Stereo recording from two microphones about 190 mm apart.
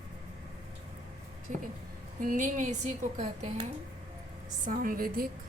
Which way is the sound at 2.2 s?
45° right (ahead or behind).